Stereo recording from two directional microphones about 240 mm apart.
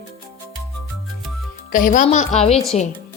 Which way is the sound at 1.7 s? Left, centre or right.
Left.